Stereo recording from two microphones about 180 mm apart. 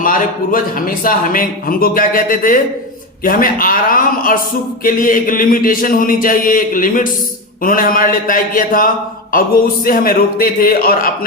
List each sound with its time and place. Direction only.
0.0 s a man's voice: 50° left (ahead or behind)